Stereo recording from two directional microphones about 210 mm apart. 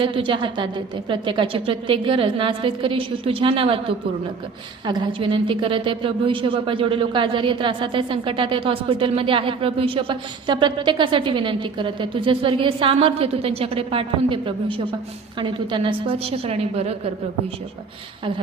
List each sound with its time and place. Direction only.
0.0 s a woman's voice: 25° right (ahead or behind)